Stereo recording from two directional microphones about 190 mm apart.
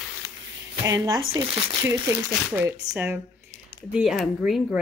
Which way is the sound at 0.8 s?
20° right (ahead or behind).